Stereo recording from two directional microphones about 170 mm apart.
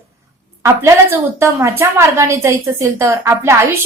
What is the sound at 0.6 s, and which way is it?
A woman's voice, 15° right (ahead or behind).